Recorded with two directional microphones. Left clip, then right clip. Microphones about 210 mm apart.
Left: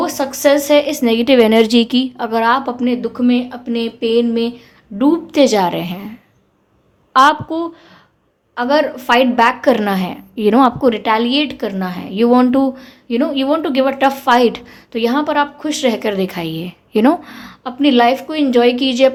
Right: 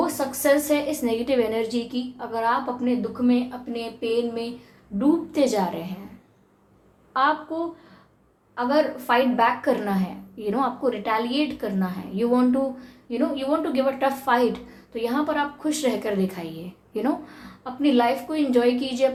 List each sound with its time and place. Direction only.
0.0 s a woman's voice: 45° left (ahead or behind)
7.1 s a woman's voice: 45° left (ahead or behind)